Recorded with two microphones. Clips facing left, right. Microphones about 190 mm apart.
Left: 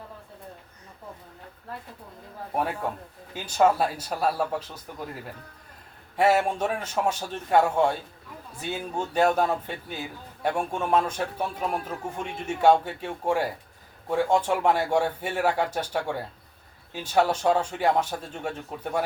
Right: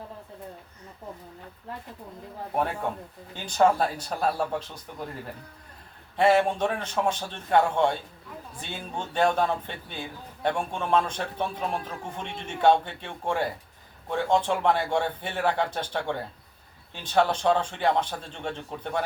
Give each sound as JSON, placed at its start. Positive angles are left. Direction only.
{"t": 3.3, "sound": "speech", "side_deg": 5}
{"t": 6.1, "sound": "speech", "side_deg": 10}